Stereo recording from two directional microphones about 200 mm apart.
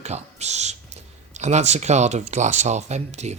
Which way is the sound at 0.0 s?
35° right (ahead or behind).